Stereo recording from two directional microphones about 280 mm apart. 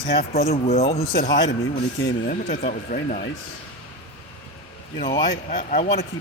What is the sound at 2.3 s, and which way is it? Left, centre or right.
Speech, left.